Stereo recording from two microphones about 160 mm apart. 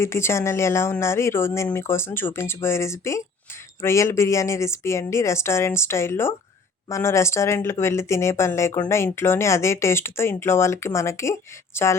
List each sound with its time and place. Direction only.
0.0 s speech: 15° left (ahead or behind)